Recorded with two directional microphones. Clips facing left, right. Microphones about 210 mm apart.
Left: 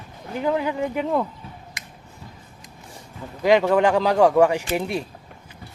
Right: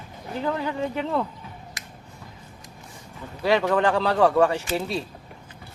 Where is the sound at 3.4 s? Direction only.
15° left (ahead or behind).